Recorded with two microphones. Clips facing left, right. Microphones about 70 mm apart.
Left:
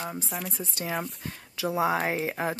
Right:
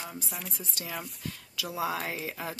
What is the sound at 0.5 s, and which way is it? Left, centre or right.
Speech, left.